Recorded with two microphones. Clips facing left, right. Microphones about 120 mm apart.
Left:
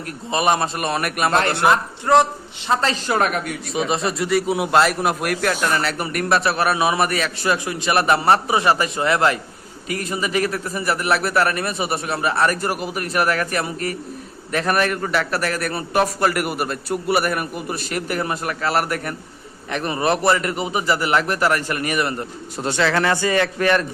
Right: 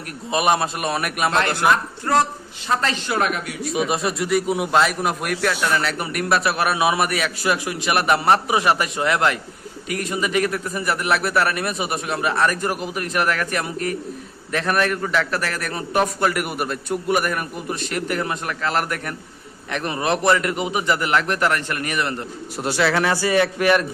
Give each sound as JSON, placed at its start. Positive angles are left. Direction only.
{"t": 0.3, "sound": "a man's voice", "side_deg": -5}
{"t": 1.3, "sound": "speech", "side_deg": 40}
{"t": 2.6, "sound": "speech", "side_deg": 35}
{"t": 3.8, "sound": "a man's voice", "side_deg": 0}
{"t": 22.5, "sound": "a man's voice", "side_deg": -5}